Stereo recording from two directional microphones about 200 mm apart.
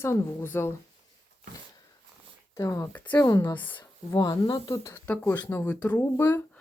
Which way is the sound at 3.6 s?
10° left (ahead or behind).